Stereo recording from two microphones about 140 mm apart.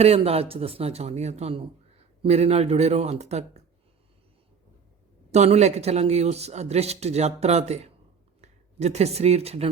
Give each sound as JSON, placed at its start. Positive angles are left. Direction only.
{"t": 0.0, "sound": "a man's voice", "side_deg": -45}
{"t": 5.3, "sound": "a man's voice", "side_deg": -55}